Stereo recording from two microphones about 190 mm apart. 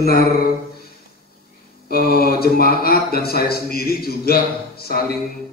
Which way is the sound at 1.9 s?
55° left (ahead or behind).